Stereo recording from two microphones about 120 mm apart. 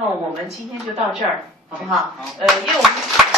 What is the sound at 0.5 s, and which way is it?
Speech, centre (ahead or behind).